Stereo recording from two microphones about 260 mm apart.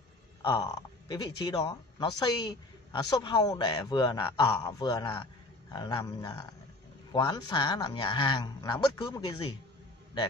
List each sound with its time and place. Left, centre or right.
0.4 s speech: centre